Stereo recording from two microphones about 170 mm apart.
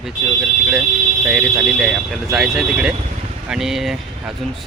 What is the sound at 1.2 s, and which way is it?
Speech, 5° right (ahead or behind).